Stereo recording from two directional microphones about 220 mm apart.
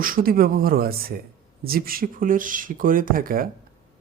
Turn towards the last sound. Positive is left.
turn(degrees=-40)  # may be behind; listen again after turning